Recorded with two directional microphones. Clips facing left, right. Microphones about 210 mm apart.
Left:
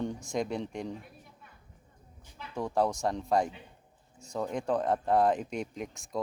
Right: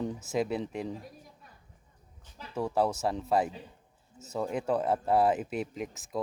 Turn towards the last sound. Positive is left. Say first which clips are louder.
# right 1 dB
turn(degrees=0)  # may be behind; listen again after turning